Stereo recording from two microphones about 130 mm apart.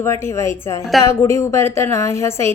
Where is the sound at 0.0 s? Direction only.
20° left (ahead or behind).